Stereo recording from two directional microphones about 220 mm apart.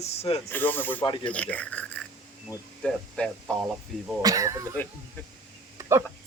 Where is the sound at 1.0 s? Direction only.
20° left (ahead or behind).